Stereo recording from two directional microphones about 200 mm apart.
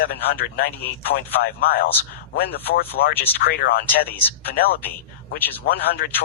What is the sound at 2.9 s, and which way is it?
Speech, 50° left (ahead or behind).